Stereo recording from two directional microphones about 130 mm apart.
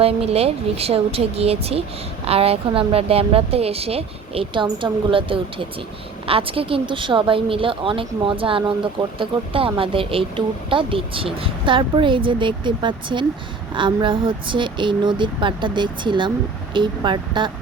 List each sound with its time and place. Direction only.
0.0 s speech: 50° right (ahead or behind)